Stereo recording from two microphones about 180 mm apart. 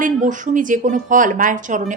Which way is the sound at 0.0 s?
45° right (ahead or behind).